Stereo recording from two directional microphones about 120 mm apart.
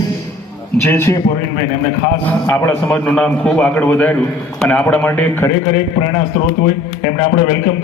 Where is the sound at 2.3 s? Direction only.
20° left (ahead or behind).